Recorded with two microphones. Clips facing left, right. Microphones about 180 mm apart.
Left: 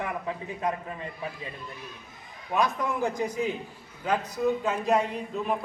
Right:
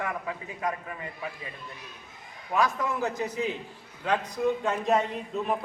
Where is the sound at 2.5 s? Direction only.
15° left (ahead or behind).